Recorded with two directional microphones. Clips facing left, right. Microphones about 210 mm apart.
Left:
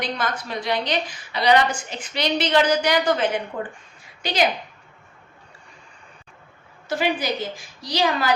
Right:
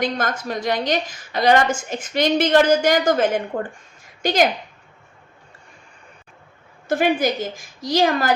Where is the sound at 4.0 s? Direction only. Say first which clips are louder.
Right 4 dB; 45° right (ahead or behind).